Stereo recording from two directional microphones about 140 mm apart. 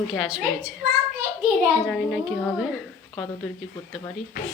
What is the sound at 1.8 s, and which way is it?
Speech, 5° right (ahead or behind).